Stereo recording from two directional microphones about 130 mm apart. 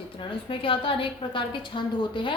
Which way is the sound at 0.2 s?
40° left (ahead or behind).